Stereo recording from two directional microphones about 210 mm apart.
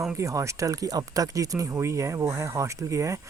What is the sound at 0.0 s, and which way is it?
Speech, 10° right (ahead or behind).